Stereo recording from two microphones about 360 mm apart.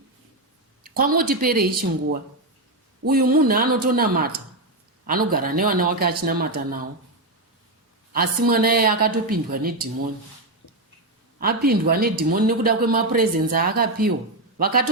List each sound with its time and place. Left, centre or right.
0.9 s a man's voice: right
3.1 s a man's voice: right
8.1 s a man's voice: right
11.3 s a man's voice: right